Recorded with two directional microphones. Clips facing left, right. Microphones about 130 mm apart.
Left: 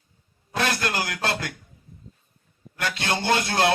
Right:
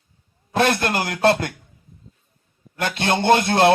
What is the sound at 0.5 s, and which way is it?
Speech, 25° right (ahead or behind).